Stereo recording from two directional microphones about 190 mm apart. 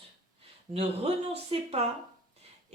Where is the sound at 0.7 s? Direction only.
35° right (ahead or behind).